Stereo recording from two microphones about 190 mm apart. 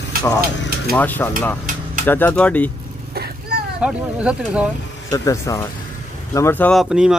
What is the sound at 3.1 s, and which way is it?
Vehicle, 55° right (ahead or behind).